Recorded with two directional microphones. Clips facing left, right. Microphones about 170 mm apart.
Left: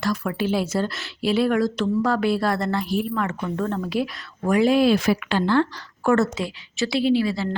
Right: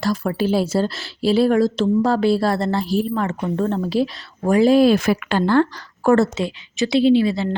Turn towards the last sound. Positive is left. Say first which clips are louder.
# right 5 dB
turn(degrees=-20)  # may be behind; listen again after turning